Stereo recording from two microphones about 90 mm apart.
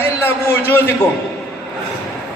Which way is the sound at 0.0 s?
25° left (ahead or behind).